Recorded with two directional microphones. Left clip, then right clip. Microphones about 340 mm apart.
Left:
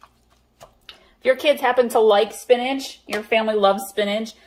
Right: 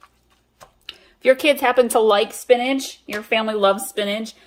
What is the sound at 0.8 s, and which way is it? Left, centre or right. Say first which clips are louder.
A woman's voice: right 3 dB; right.